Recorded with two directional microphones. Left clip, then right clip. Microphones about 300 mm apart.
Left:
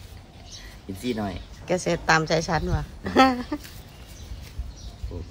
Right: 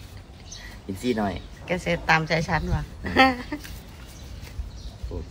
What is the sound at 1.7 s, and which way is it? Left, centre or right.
A woman's voice, centre.